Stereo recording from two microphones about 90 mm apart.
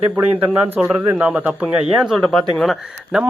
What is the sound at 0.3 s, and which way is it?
Speech, 20° right (ahead or behind).